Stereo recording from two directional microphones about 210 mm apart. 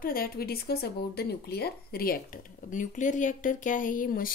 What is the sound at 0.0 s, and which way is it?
Speech, 45° left (ahead or behind).